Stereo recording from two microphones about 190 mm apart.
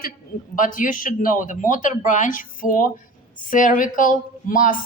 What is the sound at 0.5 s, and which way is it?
Speech, 45° left (ahead or behind).